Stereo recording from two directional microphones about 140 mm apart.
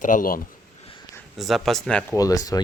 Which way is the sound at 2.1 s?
25° left (ahead or behind).